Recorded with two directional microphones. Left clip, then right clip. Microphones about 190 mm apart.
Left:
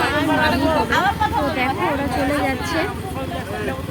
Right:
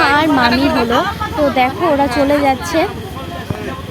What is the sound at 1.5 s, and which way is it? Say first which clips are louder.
A woman's voice: right 7 dB; 35° right (ahead or behind).